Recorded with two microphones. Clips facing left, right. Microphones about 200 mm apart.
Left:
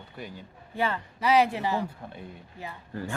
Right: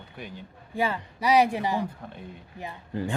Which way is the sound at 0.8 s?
10° right (ahead or behind).